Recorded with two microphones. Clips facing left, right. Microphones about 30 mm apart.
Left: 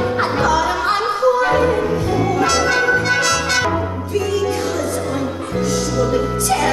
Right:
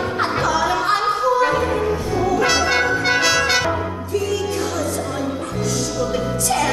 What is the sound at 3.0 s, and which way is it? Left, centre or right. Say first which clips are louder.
Music: even; centre.